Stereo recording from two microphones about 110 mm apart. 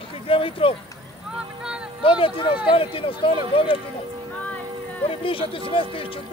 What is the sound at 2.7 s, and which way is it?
Speech, 55° left (ahead or behind).